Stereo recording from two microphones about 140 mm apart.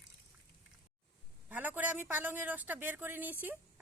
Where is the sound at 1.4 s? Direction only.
10° right (ahead or behind).